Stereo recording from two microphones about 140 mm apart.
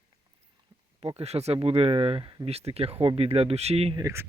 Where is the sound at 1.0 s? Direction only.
50° right (ahead or behind).